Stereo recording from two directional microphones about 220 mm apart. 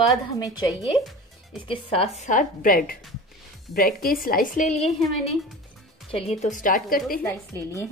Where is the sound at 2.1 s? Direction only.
35° left (ahead or behind).